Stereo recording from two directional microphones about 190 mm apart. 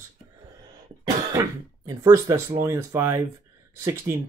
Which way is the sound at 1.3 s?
15° right (ahead or behind).